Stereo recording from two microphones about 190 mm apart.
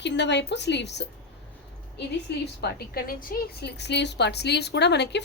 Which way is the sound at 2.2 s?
60° left (ahead or behind).